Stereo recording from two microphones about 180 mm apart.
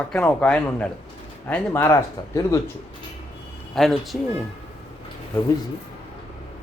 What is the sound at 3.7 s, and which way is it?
Speech, centre (ahead or behind).